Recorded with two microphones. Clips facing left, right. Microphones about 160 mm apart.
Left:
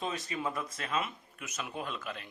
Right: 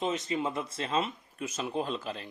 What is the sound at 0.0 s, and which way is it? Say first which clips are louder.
Speech: right 5 dB; 20° right (ahead or behind).